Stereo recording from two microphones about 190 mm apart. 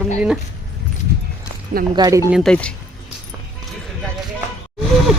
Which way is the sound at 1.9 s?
20° right (ahead or behind).